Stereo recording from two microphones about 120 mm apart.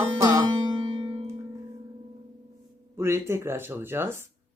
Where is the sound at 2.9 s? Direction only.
20° right (ahead or behind).